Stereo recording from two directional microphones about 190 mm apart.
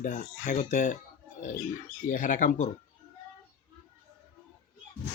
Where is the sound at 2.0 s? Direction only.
45° left (ahead or behind).